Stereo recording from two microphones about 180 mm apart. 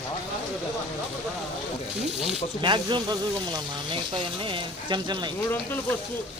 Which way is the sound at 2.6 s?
25° right (ahead or behind).